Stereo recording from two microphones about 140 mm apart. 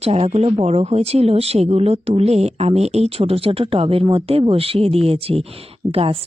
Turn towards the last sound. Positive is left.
turn(degrees=-45)  # may be behind; listen again after turning